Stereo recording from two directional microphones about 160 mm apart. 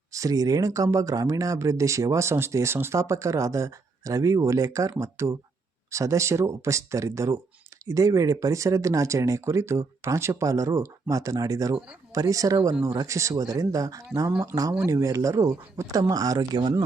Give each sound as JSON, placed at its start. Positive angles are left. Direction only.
{"t": 0.1, "sound": "speech", "side_deg": -20}